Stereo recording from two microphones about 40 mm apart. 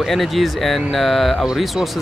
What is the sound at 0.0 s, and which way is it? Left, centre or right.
Speech, centre.